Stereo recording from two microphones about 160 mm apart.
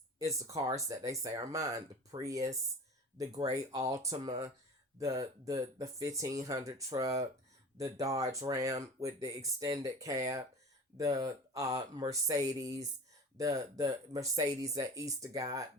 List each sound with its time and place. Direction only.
0.2 s speech: 20° right (ahead or behind)
3.7 s speech: 20° right (ahead or behind)